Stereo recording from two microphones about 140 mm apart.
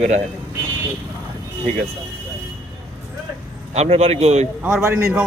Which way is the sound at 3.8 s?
45° right (ahead or behind).